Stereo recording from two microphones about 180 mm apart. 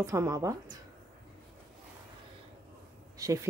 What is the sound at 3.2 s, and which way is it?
Speech, 20° right (ahead or behind).